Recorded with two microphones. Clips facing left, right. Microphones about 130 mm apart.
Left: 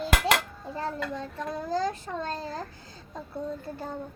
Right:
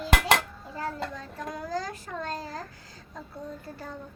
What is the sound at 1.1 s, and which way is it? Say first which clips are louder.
A child's voice: left 3 dB; 25° left (ahead or behind).